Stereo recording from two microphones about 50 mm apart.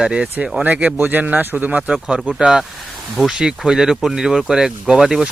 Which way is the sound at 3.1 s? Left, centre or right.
Centre.